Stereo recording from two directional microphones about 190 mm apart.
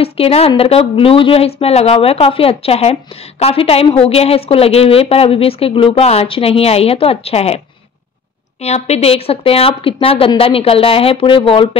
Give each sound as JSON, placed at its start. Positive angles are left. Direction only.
{"t": 0.0, "sound": "a woman's voice", "side_deg": 30}